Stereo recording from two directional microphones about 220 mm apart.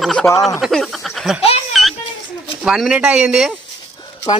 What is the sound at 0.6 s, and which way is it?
Snicker, centre (ahead or behind).